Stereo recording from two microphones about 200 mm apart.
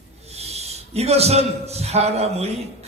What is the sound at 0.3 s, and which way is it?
A man's voice, 30° right (ahead or behind).